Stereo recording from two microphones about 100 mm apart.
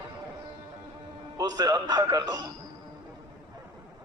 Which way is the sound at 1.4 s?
40° right (ahead or behind).